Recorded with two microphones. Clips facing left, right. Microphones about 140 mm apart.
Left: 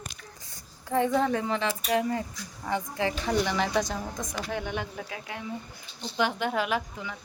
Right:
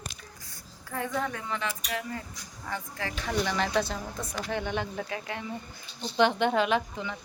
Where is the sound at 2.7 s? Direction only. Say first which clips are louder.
Left 7 dB; 20° left (ahead or behind).